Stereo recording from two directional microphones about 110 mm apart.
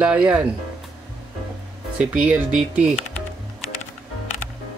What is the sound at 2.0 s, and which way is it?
Speech, 10° right (ahead or behind).